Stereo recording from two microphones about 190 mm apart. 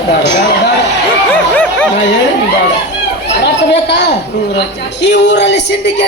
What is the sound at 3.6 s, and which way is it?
Speech, 65° left (ahead or behind).